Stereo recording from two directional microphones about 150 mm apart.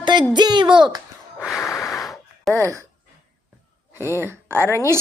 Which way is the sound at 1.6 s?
20° left (ahead or behind).